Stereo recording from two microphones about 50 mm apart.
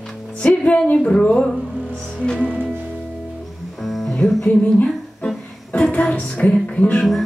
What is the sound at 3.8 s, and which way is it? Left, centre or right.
Music, centre.